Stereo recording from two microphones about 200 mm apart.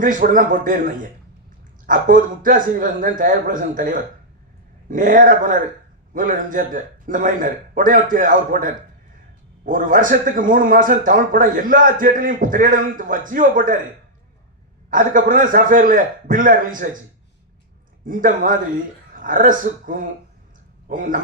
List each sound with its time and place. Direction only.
0.0 s a man's voice: 40° right (ahead or behind)
14.8 s a man's voice: 40° right (ahead or behind)
18.0 s a man's voice: 40° right (ahead or behind)